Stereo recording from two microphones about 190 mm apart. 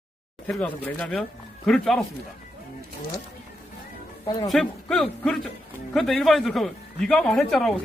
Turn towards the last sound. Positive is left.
turn(degrees=0)  # may be behind; listen again after turning